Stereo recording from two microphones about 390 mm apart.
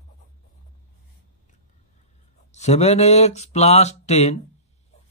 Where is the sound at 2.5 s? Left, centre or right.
Centre.